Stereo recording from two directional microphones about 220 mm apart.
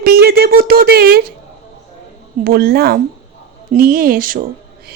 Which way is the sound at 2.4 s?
45° right (ahead or behind).